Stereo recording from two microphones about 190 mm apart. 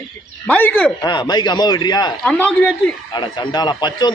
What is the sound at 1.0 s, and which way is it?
Speech, 20° left (ahead or behind).